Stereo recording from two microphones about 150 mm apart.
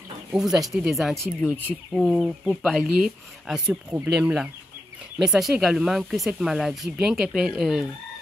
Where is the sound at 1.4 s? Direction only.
10° left (ahead or behind).